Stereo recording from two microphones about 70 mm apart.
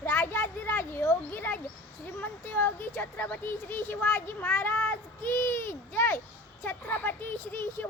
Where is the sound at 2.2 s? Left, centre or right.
Left.